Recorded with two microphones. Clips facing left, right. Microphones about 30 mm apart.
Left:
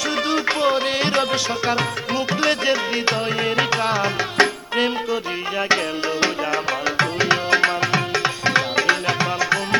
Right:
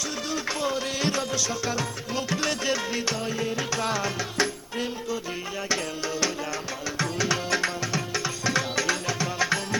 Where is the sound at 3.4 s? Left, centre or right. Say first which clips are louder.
Left 10 dB; left.